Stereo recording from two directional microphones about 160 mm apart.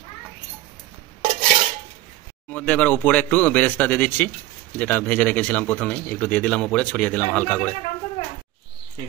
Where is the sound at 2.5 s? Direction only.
10° left (ahead or behind).